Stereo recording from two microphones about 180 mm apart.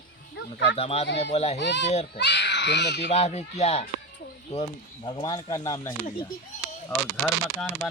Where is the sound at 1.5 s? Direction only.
75° left (ahead or behind).